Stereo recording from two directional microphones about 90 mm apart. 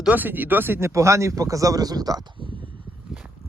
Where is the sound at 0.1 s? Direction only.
20° right (ahead or behind); by 2.2 s 45° right (ahead or behind).